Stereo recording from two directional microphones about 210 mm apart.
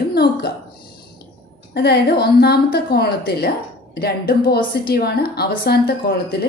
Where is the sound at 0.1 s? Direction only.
50° left (ahead or behind).